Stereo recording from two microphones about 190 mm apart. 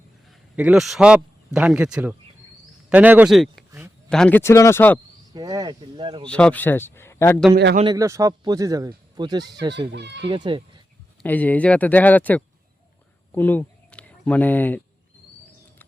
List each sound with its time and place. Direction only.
0.5 s a man's voice: 5° right (ahead or behind)
5.3 s a man's voice: 20° right (ahead or behind)
6.2 s a man's voice: 5° left (ahead or behind)
7.5 s speech: 60° right (ahead or behind)
7.9 s a man's voice: 15° right (ahead or behind)
9.9 s speech: 65° right (ahead or behind)
10.2 s a man's voice: 25° right (ahead or behind)
11.2 s a man's voice: 10° left (ahead or behind)